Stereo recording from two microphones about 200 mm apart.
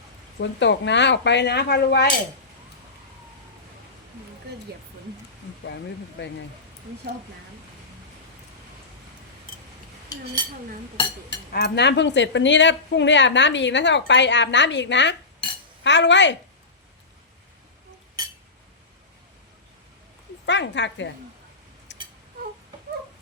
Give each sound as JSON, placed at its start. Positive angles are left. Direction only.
{"t": 0.3, "sound": "a woman's voice", "side_deg": 60}
{"t": 6.2, "sound": "a woman's voice", "side_deg": 60}
{"t": 11.5, "sound": "a woman's voice", "side_deg": 60}
{"t": 20.4, "sound": "a woman's voice", "side_deg": 60}
{"t": 21.9, "sound": "cat", "side_deg": 65}